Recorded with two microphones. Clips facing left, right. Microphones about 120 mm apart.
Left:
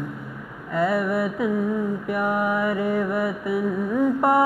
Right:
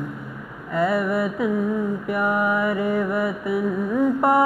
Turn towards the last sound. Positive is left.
turn(degrees=-20)  # may be behind; listen again after turning